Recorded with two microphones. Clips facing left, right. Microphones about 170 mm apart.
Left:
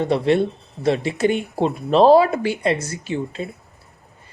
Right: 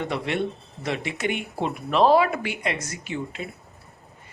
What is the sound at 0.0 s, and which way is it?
Speech, 35° left (ahead or behind).